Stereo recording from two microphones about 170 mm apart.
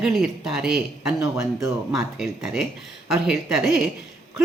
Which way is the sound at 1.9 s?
Centre (ahead or behind).